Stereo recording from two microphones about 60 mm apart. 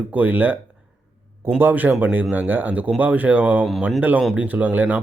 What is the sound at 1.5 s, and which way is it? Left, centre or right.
A man's voice, right.